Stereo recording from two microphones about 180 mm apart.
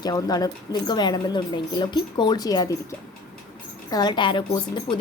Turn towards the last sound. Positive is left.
turn(degrees=25)  # may be behind; listen again after turning